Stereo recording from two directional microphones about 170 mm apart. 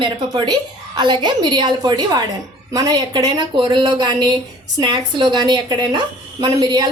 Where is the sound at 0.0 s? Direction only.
25° right (ahead or behind).